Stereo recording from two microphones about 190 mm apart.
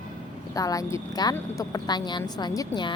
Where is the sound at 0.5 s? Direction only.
20° left (ahead or behind).